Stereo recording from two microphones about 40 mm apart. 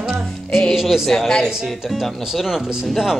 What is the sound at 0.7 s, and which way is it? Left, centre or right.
Speech, centre.